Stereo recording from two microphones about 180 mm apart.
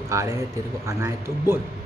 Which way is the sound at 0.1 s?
15° right (ahead or behind).